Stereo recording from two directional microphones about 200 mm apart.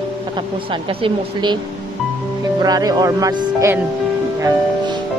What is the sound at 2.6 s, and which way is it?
Speech, 20° right (ahead or behind).